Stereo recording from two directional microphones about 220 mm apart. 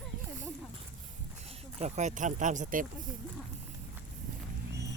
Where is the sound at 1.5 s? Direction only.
30° right (ahead or behind).